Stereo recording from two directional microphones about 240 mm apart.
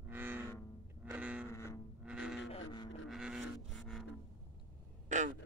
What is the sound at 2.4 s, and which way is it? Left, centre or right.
Vehicle, left.